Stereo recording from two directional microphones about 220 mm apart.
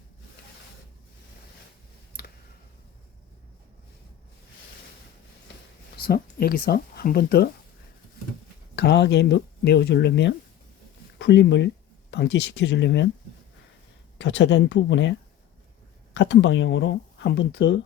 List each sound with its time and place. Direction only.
6.0 s speech: 45° left (ahead or behind)
8.7 s speech: 50° left (ahead or behind)
14.2 s speech: 50° left (ahead or behind)
16.1 s speech: 55° left (ahead or behind)